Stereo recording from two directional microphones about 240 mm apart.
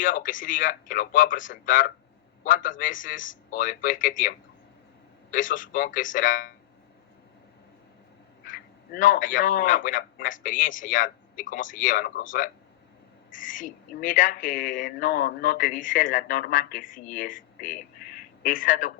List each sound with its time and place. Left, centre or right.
0.0 s a man's voice: left
8.4 s a man's voice: left